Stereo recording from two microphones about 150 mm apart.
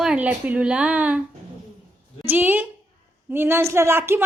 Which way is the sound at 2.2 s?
10° right (ahead or behind).